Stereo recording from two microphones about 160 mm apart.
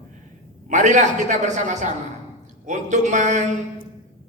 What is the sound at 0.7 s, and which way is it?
A man's voice, 50° right (ahead or behind).